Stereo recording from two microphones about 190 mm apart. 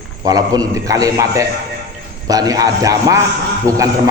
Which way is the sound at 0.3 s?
20° right (ahead or behind).